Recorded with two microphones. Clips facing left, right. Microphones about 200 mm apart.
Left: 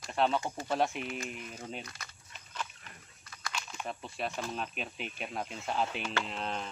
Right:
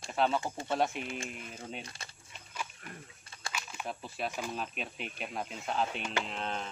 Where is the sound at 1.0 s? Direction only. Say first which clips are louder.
Left 1 dB; 25° right (ahead or behind).